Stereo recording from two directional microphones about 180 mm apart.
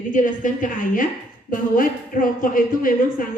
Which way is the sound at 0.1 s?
45° left (ahead or behind).